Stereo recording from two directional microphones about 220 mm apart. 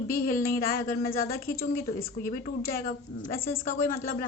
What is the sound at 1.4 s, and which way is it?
Speech, 45° left (ahead or behind).